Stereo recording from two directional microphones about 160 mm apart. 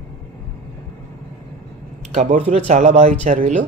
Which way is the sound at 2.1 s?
45° right (ahead or behind).